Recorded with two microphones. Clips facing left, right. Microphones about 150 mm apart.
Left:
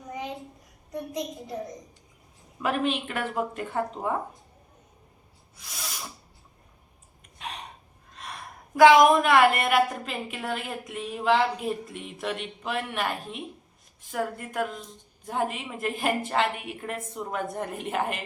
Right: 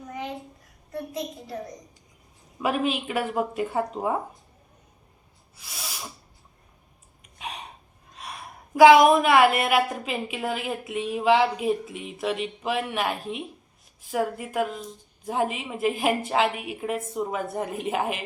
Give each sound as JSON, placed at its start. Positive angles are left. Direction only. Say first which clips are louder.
{"t": 0.9, "sound": "a child's voice", "louder": "even", "side_deg": 15}
{"t": 2.6, "sound": "speech", "louder": "right 1 dB", "side_deg": -5}
{"t": 5.5, "sound": "sneeze", "louder": "right 1 dB", "side_deg": -5}
{"t": 7.3, "sound": "a sound", "louder": "right 1 dB", "side_deg": -10}
{"t": 8.7, "sound": "a woman's voice", "louder": "right 2 dB", "side_deg": -10}